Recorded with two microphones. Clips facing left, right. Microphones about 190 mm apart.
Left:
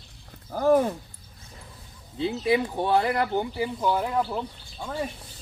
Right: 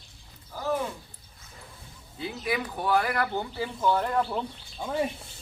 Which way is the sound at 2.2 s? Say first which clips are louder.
Left 7 dB; 25° left (ahead or behind).